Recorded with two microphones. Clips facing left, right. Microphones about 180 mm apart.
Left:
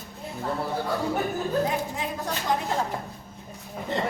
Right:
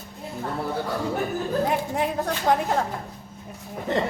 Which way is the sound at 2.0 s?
60° right (ahead or behind).